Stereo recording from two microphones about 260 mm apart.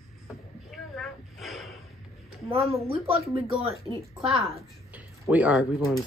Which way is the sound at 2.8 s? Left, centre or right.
Right.